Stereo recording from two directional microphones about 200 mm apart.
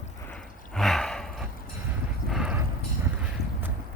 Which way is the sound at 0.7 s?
Centre (ahead or behind).